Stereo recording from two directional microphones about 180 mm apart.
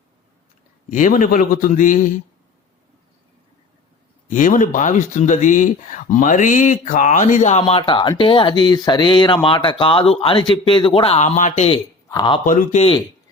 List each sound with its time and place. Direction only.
0.9 s a man's voice: 45° left (ahead or behind)
4.3 s speech: 45° left (ahead or behind)
12.0 s speech: 25° left (ahead or behind)
12.5 s a man's voice: 45° left (ahead or behind)